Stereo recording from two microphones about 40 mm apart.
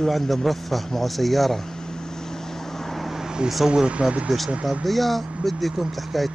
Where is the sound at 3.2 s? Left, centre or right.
Centre.